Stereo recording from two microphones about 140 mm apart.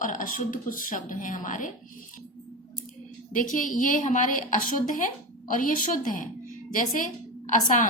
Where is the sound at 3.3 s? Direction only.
70° left (ahead or behind).